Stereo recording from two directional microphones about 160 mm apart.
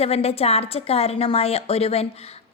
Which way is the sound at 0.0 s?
40° left (ahead or behind).